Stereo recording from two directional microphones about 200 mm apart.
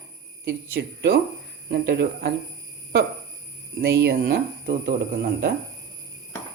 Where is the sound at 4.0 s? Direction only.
50° right (ahead or behind).